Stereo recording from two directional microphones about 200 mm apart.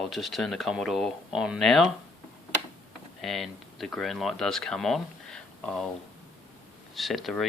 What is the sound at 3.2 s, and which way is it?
Speech, centre (ahead or behind).